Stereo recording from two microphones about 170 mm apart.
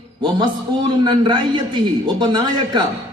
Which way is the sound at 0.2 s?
25° right (ahead or behind).